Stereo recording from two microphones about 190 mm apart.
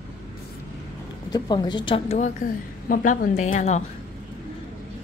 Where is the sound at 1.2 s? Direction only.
20° left (ahead or behind).